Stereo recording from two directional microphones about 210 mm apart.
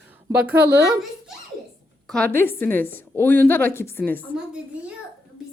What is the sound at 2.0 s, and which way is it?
A woman's voice, 5° left (ahead or behind).